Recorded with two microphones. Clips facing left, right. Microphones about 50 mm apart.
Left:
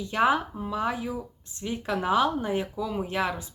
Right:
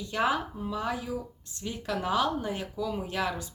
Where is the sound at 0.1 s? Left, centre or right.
Left.